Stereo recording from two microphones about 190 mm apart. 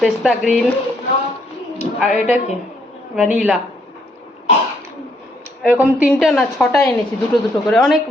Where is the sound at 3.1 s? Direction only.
5° right (ahead or behind).